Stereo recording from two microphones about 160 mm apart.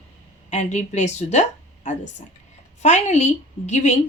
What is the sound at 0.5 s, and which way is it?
A woman's voice, 45° left (ahead or behind).